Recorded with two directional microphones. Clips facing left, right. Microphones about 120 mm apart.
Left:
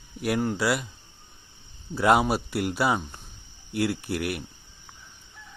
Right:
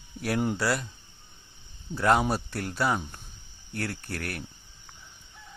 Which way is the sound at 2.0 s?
15° left (ahead or behind).